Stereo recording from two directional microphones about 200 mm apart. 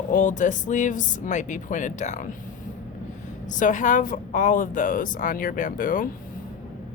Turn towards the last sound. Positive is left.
turn(degrees=45)  # may be behind; listen again after turning